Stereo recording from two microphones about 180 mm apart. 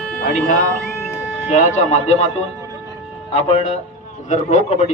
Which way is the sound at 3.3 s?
40° left (ahead or behind).